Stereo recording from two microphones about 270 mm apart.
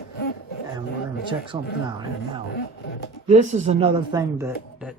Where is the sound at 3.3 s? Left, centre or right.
Right; by 5.0 s centre.